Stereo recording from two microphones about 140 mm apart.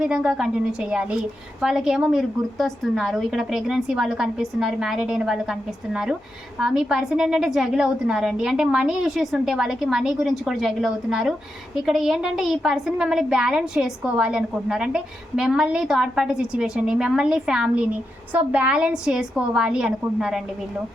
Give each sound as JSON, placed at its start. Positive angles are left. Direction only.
{"t": 0.0, "sound": "a woman's voice", "side_deg": -5}